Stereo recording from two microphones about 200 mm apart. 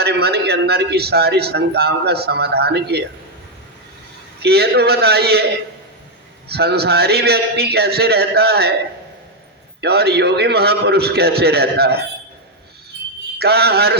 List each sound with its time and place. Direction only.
0.0 s a man's voice: 55° right (ahead or behind)
4.4 s a man's voice: 55° right (ahead or behind)
6.5 s a man's voice: 55° right (ahead or behind)
9.8 s a man's voice: 55° right (ahead or behind)
13.4 s a man's voice: 55° right (ahead or behind)